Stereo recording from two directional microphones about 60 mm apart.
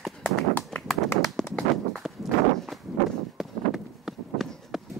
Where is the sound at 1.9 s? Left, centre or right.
Centre.